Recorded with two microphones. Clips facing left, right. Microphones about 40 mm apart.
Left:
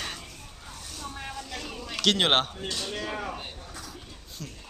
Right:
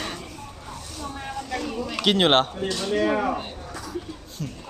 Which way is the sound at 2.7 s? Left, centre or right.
Right.